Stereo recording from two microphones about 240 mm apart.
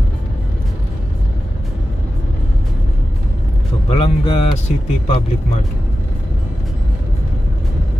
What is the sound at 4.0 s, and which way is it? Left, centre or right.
Speech, left.